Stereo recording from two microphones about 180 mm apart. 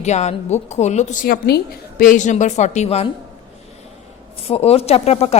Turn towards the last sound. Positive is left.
turn(degrees=35)  # may be behind; listen again after turning